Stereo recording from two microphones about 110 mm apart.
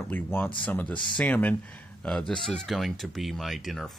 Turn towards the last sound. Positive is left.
turn(degrees=0)  # may be behind; listen again after turning